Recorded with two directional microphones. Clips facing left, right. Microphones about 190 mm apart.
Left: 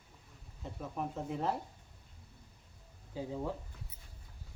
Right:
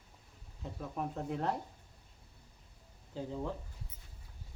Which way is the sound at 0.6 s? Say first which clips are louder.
Even; centre (ahead or behind).